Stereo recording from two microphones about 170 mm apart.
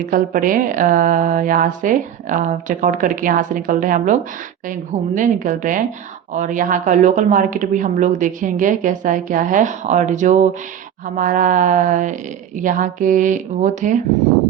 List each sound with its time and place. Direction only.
0.1 s speech: 55° right (ahead or behind)